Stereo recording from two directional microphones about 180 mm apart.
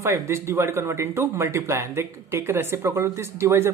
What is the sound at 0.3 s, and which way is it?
Speech, 15° right (ahead or behind).